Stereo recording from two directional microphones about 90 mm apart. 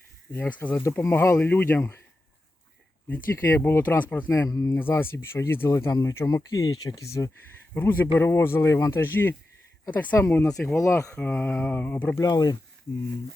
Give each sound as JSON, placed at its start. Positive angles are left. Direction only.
{"t": 0.3, "sound": "speech", "side_deg": 20}
{"t": 0.8, "sound": "speech", "side_deg": 35}
{"t": 1.4, "sound": "speech", "side_deg": 20}
{"t": 3.1, "sound": "speech", "side_deg": 25}
{"t": 4.3, "sound": "speech", "side_deg": 40}
{"t": 4.8, "sound": "speech", "side_deg": 25}
{"t": 7.7, "sound": "speech", "side_deg": 25}
{"t": 10.8, "sound": "speech", "side_deg": 35}
{"t": 11.3, "sound": "speech", "side_deg": 25}
{"t": 12.1, "sound": "speech", "side_deg": 45}